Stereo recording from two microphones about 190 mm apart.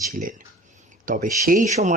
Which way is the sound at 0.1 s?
45° right (ahead or behind).